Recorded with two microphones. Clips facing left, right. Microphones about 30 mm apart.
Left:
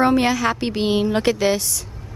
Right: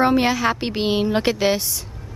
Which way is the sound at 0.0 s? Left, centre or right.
Centre.